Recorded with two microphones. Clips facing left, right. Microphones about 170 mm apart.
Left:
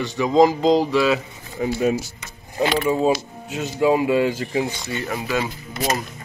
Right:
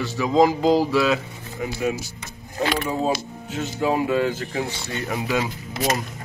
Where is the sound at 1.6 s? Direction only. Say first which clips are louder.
Left 6 dB; 30° left (ahead or behind).